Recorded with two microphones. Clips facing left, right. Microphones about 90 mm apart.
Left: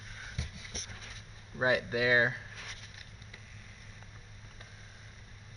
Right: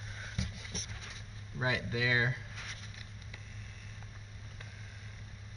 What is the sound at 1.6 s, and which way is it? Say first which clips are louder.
Speech: left 5 dB; 45° left (ahead or behind).